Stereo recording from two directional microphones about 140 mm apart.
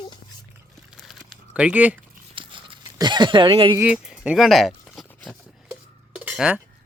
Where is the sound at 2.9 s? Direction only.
30° right (ahead or behind).